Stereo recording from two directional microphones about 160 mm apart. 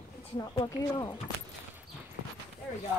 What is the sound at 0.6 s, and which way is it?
Speech, 30° left (ahead or behind).